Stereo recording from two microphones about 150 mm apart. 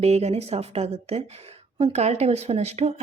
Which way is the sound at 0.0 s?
45° right (ahead or behind).